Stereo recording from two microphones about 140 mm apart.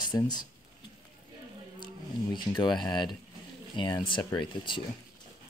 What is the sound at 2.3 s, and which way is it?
Speech, 35° left (ahead or behind).